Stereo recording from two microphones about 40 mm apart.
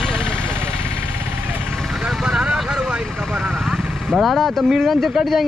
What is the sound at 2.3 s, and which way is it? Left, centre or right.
Vehicle, right.